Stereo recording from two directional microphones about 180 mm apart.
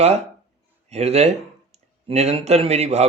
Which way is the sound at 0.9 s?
35° right (ahead or behind).